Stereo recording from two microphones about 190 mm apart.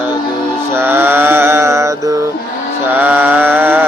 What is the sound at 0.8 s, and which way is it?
Mantra, 10° right (ahead or behind).